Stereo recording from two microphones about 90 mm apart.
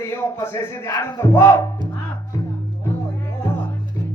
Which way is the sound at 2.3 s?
35° left (ahead or behind).